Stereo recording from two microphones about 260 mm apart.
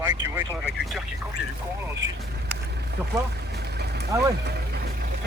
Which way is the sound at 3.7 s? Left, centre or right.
Right.